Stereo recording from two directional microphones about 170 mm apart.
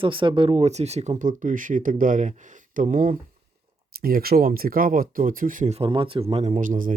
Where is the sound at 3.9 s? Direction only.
60° right (ahead or behind); by 6.5 s 35° right (ahead or behind).